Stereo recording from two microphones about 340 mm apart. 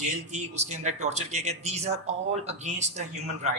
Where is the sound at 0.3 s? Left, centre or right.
Centre.